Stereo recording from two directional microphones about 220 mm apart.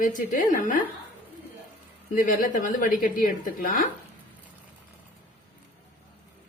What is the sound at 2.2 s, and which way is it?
Speech, 40° left (ahead or behind).